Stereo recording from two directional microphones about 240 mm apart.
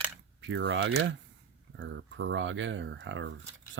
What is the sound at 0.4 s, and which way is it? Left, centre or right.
Speech, right.